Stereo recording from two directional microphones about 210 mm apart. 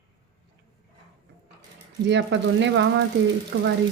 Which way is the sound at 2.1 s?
60° right (ahead or behind).